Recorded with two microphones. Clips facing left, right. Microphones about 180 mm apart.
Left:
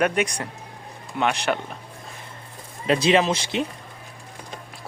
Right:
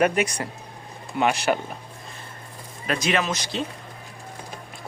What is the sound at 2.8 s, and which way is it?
Speech, 25° left (ahead or behind).